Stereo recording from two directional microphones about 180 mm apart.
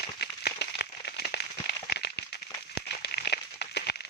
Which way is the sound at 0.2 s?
65° left (ahead or behind).